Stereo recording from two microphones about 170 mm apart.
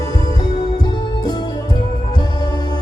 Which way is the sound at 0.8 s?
25° left (ahead or behind).